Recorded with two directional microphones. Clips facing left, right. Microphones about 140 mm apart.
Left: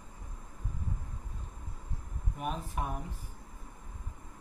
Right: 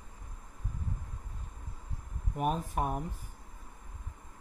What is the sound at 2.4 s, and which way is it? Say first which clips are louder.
Speech: right 5 dB; 45° right (ahead or behind).